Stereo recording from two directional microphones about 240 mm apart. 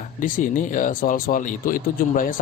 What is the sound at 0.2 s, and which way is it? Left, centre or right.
Speech, left.